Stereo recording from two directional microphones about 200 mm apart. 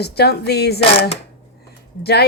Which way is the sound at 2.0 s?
55° left (ahead or behind).